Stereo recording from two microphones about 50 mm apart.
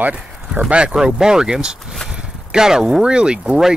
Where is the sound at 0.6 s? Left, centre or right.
Right.